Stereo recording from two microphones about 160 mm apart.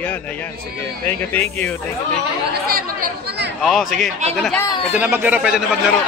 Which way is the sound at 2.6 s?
70° right (ahead or behind).